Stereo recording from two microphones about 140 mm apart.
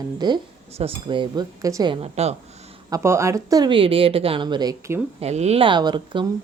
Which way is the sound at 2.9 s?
20° right (ahead or behind).